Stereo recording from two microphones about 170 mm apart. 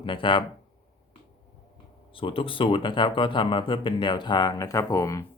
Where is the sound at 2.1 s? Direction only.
30° left (ahead or behind).